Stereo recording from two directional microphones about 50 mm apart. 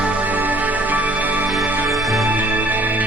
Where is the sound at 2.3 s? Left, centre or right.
Right.